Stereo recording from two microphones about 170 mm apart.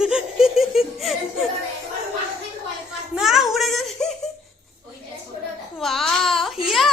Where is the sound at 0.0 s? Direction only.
5° right (ahead or behind).